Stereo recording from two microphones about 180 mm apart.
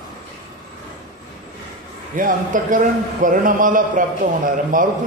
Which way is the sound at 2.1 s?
45° right (ahead or behind).